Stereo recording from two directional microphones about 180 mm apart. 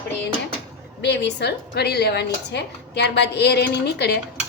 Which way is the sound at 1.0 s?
70° left (ahead or behind).